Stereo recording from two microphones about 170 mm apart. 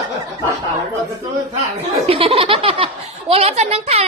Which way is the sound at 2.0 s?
35° right (ahead or behind).